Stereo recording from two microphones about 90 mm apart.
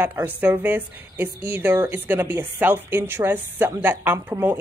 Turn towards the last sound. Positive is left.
turn(degrees=-25)  # may be behind; listen again after turning